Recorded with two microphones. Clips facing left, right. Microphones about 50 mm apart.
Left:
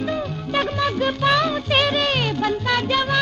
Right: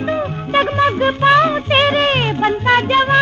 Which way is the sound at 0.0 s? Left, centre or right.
Right.